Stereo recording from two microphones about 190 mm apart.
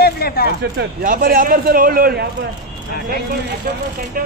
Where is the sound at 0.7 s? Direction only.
50° right (ahead or behind).